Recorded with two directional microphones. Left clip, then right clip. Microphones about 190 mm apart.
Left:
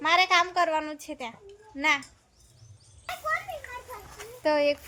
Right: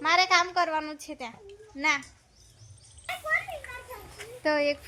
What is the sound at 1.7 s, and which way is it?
Speech, 15° left (ahead or behind).